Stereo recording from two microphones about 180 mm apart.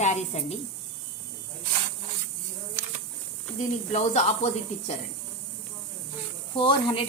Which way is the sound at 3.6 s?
40° left (ahead or behind).